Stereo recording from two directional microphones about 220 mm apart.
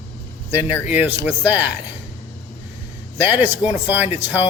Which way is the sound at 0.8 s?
5° right (ahead or behind).